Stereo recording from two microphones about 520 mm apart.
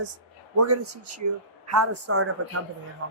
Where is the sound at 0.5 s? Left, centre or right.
Right.